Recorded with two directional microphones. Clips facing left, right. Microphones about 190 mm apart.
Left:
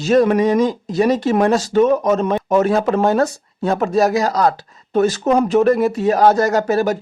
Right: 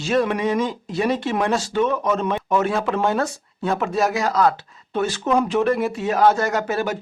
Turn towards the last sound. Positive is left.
turn(degrees=40)  # may be behind; listen again after turning